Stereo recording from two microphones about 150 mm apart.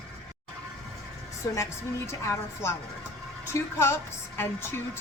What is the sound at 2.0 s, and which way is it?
A woman's voice, 20° left (ahead or behind).